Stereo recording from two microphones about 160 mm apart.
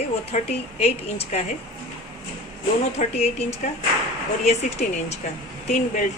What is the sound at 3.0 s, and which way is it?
A woman's voice, 40° left (ahead or behind).